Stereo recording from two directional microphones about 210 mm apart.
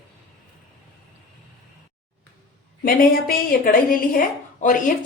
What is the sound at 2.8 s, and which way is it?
Speech, 45° left (ahead or behind).